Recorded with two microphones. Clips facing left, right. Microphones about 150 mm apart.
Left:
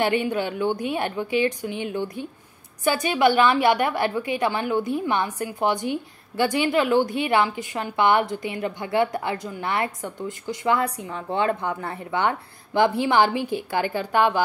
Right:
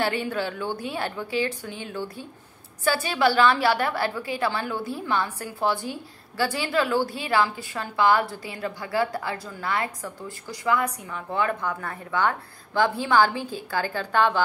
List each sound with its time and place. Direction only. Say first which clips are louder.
0.0 s a woman's voice: left 4 dB; 15° left (ahead or behind)